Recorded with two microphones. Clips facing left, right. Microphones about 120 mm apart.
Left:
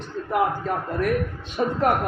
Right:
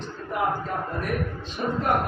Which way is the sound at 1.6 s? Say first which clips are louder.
Left 4 dB; 70° left (ahead or behind).